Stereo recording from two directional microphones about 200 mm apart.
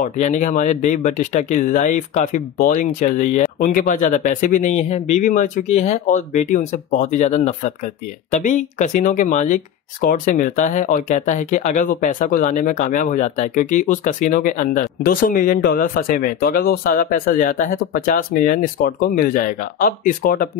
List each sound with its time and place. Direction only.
0.0 s speech: 35° left (ahead or behind)